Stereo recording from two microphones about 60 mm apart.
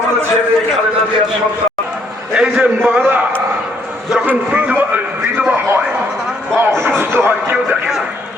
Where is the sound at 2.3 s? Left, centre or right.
Centre.